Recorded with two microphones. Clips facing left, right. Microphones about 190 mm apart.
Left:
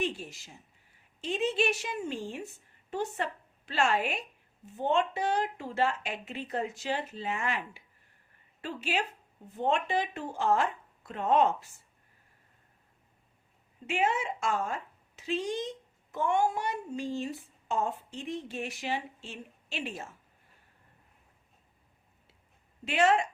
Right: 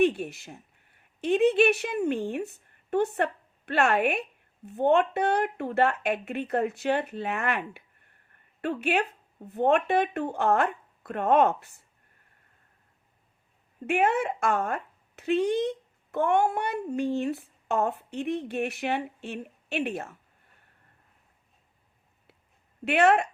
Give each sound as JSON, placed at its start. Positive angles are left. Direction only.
{"t": 0.0, "sound": "a woman's voice", "side_deg": -60}
{"t": 13.8, "sound": "a woman's voice", "side_deg": -60}
{"t": 22.8, "sound": "a woman's voice", "side_deg": -60}